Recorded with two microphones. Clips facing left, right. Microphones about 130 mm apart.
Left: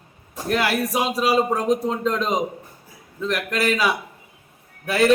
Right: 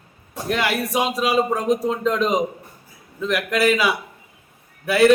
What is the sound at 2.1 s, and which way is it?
Speech, 35° left (ahead or behind).